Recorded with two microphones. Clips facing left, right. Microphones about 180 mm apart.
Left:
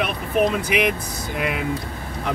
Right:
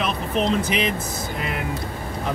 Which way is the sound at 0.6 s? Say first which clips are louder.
Left 2 dB; 10° left (ahead or behind).